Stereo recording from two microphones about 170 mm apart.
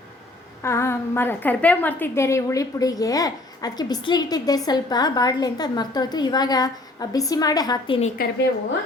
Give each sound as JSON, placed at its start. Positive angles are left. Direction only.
{"t": 0.6, "sound": "a woman's voice", "side_deg": 15}